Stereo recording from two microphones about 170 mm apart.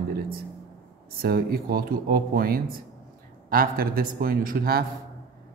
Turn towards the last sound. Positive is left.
turn(degrees=-60)  # may be behind; listen again after turning